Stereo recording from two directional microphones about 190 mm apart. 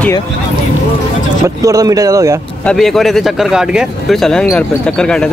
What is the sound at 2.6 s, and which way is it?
Speech, centre (ahead or behind).